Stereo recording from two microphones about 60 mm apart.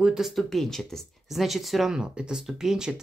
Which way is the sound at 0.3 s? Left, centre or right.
Centre.